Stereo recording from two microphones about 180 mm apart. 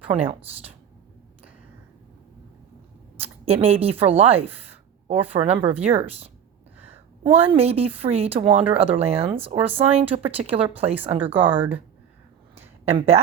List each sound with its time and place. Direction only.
3.4 s speech: 35° right (ahead or behind)
6.7 s a sound: 10° right (ahead or behind)
7.3 s speech: 35° right (ahead or behind)
12.8 s speech: 35° right (ahead or behind)